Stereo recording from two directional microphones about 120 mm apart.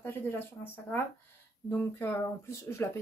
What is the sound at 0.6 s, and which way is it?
A woman's voice, 15° left (ahead or behind).